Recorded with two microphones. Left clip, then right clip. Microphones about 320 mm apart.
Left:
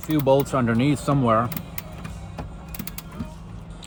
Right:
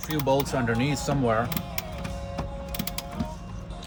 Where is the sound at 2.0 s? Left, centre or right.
Centre.